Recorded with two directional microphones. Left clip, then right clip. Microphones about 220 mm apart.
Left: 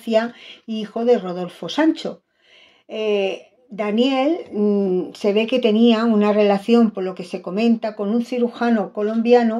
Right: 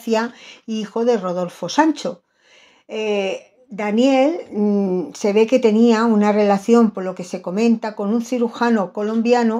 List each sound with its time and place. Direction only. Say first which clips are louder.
0.0 s a woman's voice: left 1 dB; 20° right (ahead or behind)